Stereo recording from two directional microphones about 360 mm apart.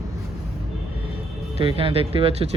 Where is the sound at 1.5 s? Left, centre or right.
Centre.